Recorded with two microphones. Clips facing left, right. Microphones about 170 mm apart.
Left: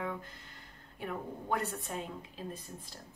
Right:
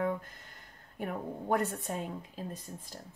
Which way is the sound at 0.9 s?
45° right (ahead or behind).